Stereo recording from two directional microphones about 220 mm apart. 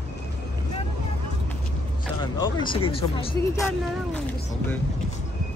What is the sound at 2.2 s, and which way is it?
Speech, 20° left (ahead or behind).